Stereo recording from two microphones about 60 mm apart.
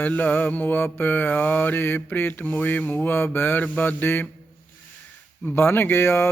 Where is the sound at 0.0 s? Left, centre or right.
Left.